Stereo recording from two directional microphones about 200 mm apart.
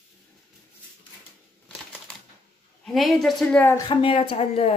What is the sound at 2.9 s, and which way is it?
Speech, centre (ahead or behind).